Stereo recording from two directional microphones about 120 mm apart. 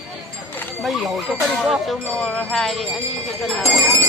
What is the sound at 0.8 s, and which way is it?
Speech, centre (ahead or behind).